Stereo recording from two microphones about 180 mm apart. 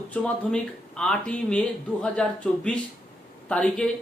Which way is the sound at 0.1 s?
5° left (ahead or behind).